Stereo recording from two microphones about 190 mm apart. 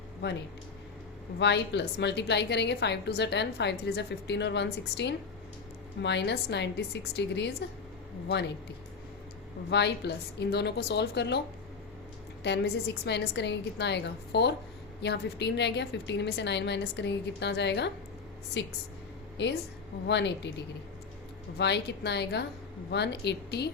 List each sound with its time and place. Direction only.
1.4 s a woman's voice: 65° left (ahead or behind)
9.6 s a woman's voice: 65° left (ahead or behind)
19.4 s a woman's voice: 65° left (ahead or behind)